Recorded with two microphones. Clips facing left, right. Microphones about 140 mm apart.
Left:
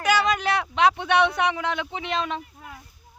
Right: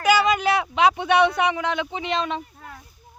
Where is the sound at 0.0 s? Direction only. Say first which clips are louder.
Right 3 dB; 5° right (ahead or behind).